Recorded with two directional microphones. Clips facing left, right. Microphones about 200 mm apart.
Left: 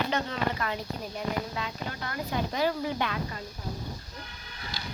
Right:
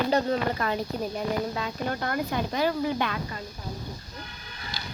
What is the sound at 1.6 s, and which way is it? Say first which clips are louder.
Speech: right 6 dB; 50° right (ahead or behind).